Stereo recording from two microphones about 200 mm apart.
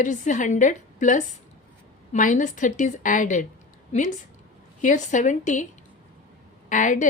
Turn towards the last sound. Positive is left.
turn(degrees=40)  # may be behind; listen again after turning